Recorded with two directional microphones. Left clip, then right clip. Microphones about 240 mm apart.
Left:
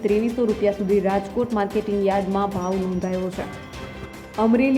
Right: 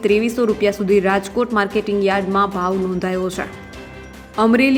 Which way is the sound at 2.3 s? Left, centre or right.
Right.